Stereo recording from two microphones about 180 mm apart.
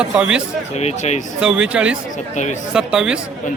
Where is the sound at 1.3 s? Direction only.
5° right (ahead or behind).